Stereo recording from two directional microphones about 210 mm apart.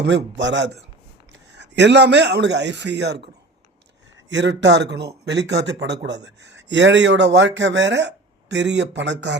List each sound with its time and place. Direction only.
0.0 s speech: 55° right (ahead or behind)
4.3 s speech: 55° right (ahead or behind)